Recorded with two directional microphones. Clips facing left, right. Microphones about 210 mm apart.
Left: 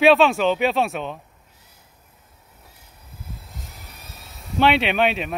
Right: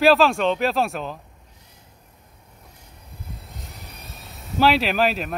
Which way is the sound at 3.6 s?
Centre (ahead or behind).